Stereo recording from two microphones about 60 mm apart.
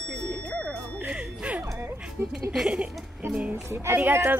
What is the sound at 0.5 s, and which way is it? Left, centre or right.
Music, centre.